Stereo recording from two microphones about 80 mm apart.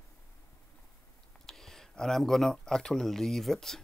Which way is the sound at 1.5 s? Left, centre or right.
Centre.